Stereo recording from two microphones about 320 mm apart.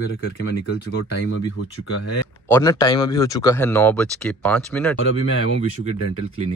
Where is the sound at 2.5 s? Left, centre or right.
Centre.